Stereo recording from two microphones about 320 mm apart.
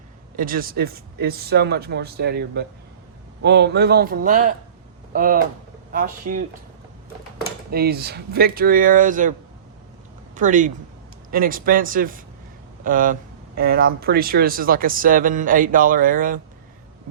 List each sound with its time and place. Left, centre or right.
0.3 s speech: right
7.7 s speech: right
10.3 s speech: right